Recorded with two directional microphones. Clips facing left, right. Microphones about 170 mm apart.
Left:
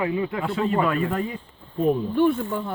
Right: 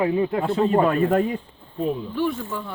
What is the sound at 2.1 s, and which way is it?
Speech, 55° left (ahead or behind).